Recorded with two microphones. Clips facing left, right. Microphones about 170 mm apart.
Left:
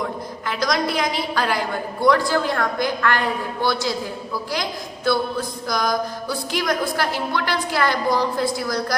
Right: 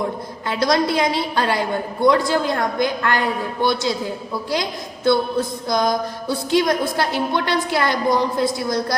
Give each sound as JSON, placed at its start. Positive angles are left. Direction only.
{"t": 0.0, "sound": "mantra", "side_deg": -30}